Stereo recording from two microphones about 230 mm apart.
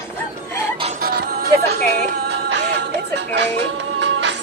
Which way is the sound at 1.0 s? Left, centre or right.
Right.